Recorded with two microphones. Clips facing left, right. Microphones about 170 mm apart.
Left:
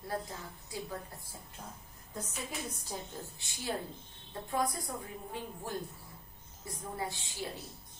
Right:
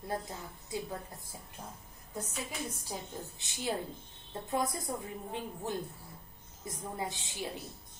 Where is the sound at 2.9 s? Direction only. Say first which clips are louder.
Right 1 dB; 15° right (ahead or behind).